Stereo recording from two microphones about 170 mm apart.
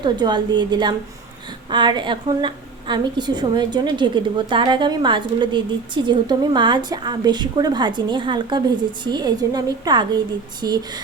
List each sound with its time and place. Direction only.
0.0 s a woman's voice: 25° right (ahead or behind)